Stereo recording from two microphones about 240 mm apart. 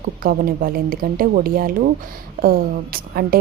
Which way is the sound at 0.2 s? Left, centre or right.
Right.